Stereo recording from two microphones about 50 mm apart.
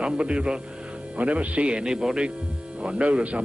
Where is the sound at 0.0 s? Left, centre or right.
Right.